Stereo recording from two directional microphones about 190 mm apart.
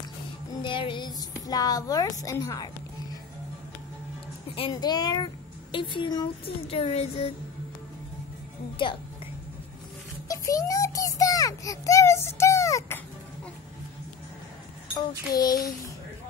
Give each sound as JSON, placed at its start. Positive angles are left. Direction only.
{"t": 0.6, "sound": "a sound", "side_deg": 25}
{"t": 2.2, "sound": "a woman's voice", "side_deg": 15}
{"t": 4.5, "sound": "speech", "side_deg": 25}
{"t": 10.2, "sound": "child singing", "side_deg": 20}
{"t": 15.0, "sound": "speech", "side_deg": 20}